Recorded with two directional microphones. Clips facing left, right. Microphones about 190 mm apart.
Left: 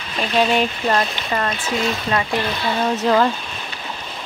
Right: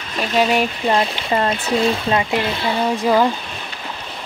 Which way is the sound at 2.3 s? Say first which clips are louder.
Right 2 dB; 10° right (ahead or behind).